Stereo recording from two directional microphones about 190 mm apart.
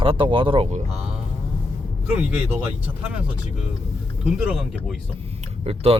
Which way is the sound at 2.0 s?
5° right (ahead or behind).